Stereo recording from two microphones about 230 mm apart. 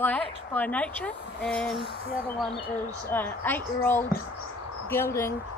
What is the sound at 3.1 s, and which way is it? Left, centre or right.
A woman's voice, centre.